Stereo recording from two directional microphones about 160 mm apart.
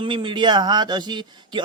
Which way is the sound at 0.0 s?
30° right (ahead or behind).